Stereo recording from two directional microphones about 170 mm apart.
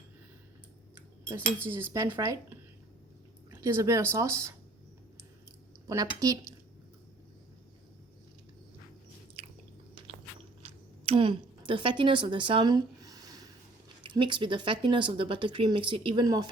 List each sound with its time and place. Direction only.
0.9 s cutlery: 15° right (ahead or behind)
1.6 s speech: 15° right (ahead or behind)
3.5 s speech: 15° right (ahead or behind)
5.9 s speech: 20° right (ahead or behind)
10.6 s a sound: 35° right (ahead or behind)
14.0 s speech: 30° right (ahead or behind)